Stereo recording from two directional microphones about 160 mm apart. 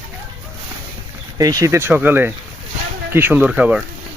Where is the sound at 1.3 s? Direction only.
20° right (ahead or behind).